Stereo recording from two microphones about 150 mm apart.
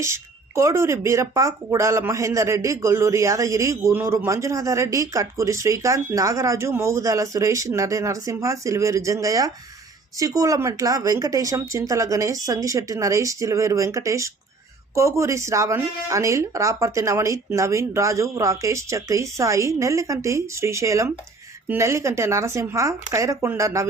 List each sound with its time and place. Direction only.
0.0 s speech: 20° right (ahead or behind)